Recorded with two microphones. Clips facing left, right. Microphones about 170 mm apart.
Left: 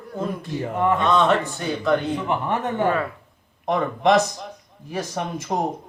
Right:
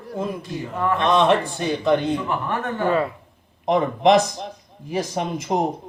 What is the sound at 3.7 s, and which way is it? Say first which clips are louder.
Speech: right 2 dB; 15° right (ahead or behind).